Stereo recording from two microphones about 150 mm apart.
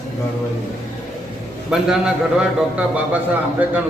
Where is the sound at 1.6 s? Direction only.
5° right (ahead or behind).